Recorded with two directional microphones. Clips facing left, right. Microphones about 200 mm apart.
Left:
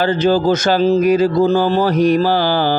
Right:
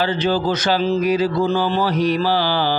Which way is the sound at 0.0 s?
45° left (ahead or behind).